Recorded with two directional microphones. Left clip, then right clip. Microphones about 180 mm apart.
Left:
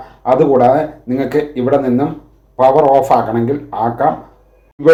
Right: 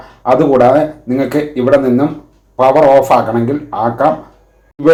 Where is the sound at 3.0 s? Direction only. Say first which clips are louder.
Right 2 dB; 30° left (ahead or behind).